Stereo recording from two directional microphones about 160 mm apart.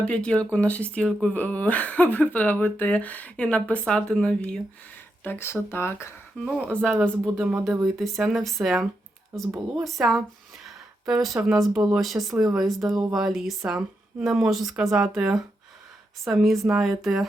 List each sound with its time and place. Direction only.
0.0 s speech: 5° left (ahead or behind)
6.4 s speech: centre (ahead or behind)
7.3 s speech: 10° right (ahead or behind)
7.9 s speech: centre (ahead or behind)
9.5 s speech: 15° right (ahead or behind)
9.8 s speech: centre (ahead or behind)